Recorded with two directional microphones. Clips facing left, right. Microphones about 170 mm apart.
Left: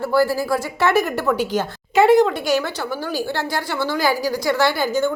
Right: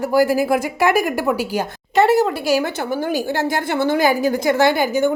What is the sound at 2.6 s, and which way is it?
A woman's voice, 20° right (ahead or behind).